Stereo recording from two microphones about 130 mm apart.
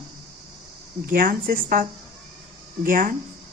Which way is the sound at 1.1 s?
90° right.